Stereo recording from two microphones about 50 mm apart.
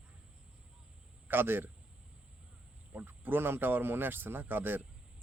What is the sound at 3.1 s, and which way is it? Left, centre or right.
Speech, right.